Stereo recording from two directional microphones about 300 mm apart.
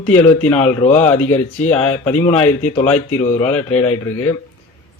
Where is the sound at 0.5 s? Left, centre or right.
Left.